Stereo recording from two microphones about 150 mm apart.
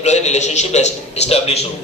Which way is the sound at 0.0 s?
50° left (ahead or behind).